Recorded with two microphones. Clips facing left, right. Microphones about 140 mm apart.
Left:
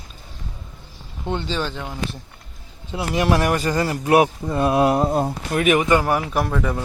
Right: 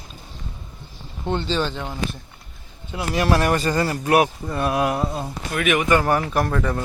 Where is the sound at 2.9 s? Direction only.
25° left (ahead or behind).